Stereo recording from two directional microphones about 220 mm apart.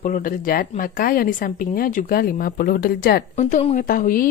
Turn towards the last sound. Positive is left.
turn(degrees=40)  # may be behind; listen again after turning